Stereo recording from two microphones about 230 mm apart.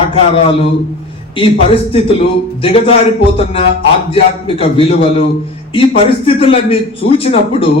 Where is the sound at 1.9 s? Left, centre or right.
Left.